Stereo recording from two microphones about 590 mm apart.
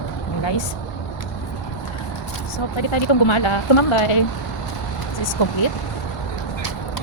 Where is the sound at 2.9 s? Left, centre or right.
Left.